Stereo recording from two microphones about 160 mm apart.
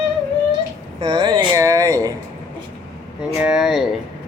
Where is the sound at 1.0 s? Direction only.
30° right (ahead or behind).